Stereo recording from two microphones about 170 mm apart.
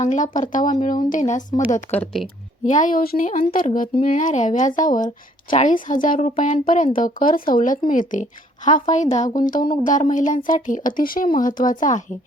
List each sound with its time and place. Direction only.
0.0 s speech: 45° left (ahead or behind)
1.9 s speech: 10° left (ahead or behind)
2.6 s speech: 50° left (ahead or behind)